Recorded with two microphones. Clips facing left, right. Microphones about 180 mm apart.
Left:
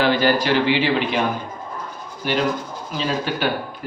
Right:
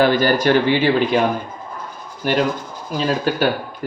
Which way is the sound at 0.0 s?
45° right (ahead or behind).